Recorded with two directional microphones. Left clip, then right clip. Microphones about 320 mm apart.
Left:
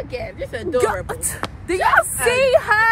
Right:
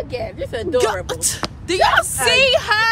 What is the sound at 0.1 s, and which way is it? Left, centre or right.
Speech, right.